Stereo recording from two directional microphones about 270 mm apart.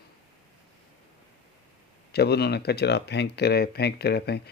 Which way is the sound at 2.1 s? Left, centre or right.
Left.